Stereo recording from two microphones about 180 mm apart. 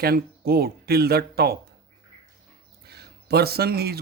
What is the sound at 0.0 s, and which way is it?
Speech, 60° right (ahead or behind).